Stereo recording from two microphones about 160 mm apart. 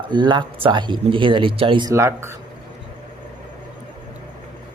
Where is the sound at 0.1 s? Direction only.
30° right (ahead or behind).